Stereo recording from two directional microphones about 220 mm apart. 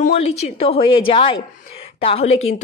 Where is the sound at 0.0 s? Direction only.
30° left (ahead or behind).